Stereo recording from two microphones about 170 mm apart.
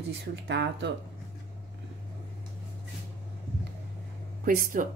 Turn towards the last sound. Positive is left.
turn(degrees=-55)  # may be behind; listen again after turning